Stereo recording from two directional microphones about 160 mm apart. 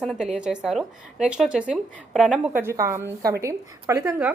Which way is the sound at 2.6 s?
15° right (ahead or behind).